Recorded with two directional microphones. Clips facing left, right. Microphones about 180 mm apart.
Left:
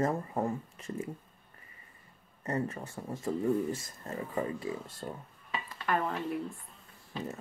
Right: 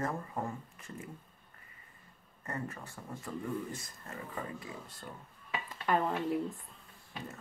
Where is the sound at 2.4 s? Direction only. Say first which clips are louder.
Left 7 dB; 25° left (ahead or behind).